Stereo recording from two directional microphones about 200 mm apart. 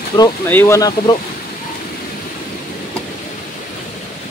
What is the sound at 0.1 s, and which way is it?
Speech, 15° left (ahead or behind).